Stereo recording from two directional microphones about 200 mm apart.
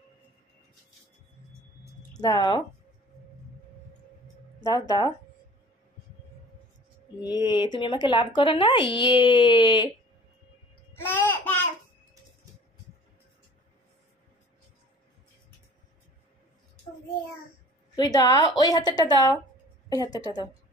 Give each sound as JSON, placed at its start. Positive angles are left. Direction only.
{"t": 2.1, "sound": "speech", "side_deg": 20}
{"t": 4.6, "sound": "speech", "side_deg": 20}
{"t": 7.2, "sound": "speech", "side_deg": 20}
{"t": 11.0, "sound": "babbling", "side_deg": 10}
{"t": 17.9, "sound": "a woman's voice", "side_deg": 15}